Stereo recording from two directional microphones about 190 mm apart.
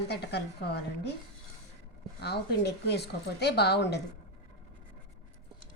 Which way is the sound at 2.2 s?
60° left (ahead or behind).